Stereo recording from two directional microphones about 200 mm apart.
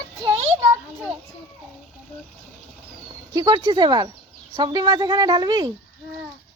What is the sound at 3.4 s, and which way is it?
Speech, 20° right (ahead or behind).